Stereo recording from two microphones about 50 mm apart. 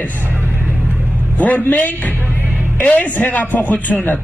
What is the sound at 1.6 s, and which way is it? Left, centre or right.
Speech, left.